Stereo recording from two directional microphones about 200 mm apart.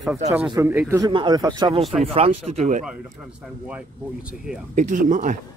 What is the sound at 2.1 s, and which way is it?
Speech, 30° right (ahead or behind).